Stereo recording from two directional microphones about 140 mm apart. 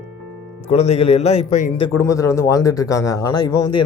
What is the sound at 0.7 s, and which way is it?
A man's voice, 45° left (ahead or behind).